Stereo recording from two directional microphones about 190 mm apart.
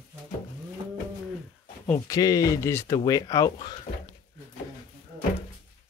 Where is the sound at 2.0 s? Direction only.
20° left (ahead or behind).